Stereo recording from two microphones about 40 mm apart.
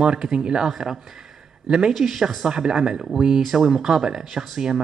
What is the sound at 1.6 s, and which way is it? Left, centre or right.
Speech, centre.